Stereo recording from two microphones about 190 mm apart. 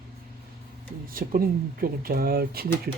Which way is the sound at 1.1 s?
50° right (ahead or behind).